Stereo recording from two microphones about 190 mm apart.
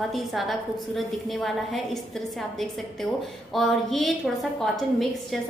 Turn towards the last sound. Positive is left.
turn(degrees=0)  # may be behind; listen again after turning